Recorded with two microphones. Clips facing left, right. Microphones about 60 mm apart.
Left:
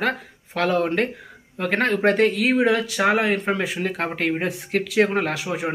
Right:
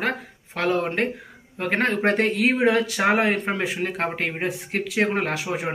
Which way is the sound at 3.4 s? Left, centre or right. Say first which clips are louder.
Left 2 dB; right.